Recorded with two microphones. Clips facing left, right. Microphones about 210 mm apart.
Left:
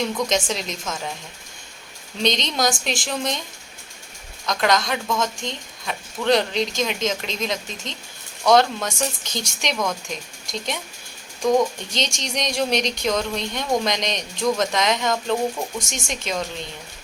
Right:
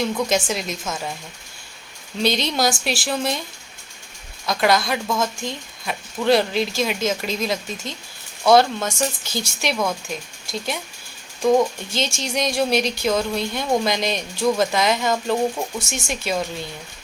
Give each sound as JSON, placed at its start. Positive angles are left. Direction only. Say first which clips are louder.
{"t": 0.3, "sound": "speech", "louder": "right 2 dB", "side_deg": -5}
{"t": 2.2, "sound": "speech", "louder": "right 1 dB", "side_deg": -5}
{"t": 4.4, "sound": "speech", "louder": "right 2 dB", "side_deg": -10}